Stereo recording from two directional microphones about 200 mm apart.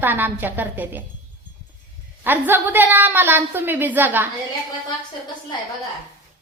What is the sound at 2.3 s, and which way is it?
A woman's voice, 10° right (ahead or behind).